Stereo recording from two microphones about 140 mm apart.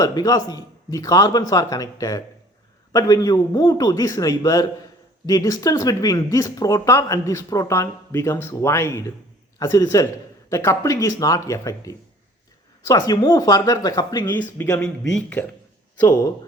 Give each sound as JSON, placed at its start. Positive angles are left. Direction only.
{"t": 0.0, "sound": "speech", "side_deg": 25}
{"t": 14.4, "sound": "speech", "side_deg": 15}
{"t": 16.0, "sound": "speech", "side_deg": 25}